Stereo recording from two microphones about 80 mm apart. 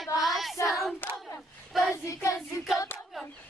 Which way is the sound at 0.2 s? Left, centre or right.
Centre.